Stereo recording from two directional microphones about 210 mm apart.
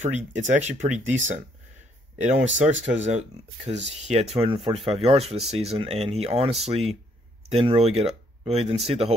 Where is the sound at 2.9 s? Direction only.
35° right (ahead or behind).